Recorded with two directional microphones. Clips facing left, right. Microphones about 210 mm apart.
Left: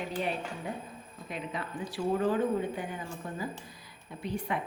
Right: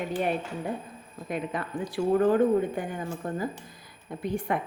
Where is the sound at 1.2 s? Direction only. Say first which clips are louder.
Right 6 dB; 50° right (ahead or behind).